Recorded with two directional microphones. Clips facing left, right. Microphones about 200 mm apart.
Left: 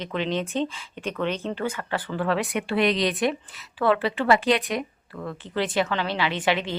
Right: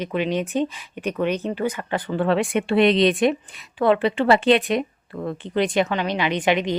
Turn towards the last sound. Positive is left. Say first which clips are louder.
# right 4 dB
turn(degrees=-15)  # may be behind; listen again after turning